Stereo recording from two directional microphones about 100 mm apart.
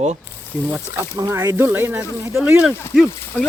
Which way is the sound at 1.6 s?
20° right (ahead or behind).